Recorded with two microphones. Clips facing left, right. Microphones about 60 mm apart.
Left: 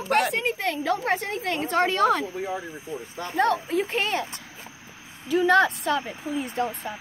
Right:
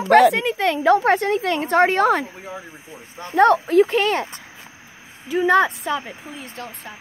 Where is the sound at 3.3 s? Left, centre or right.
Right.